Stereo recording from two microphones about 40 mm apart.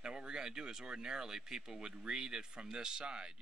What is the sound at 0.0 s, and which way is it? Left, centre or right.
Speech, centre.